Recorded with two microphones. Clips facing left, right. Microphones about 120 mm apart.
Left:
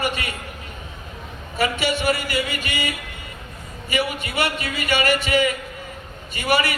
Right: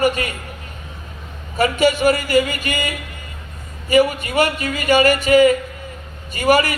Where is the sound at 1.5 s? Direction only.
40° right (ahead or behind).